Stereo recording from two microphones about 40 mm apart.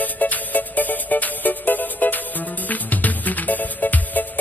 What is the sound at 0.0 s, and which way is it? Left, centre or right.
Music, left.